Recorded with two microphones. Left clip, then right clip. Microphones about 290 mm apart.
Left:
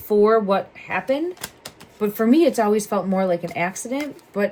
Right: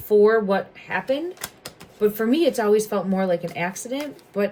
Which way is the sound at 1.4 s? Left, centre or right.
Centre.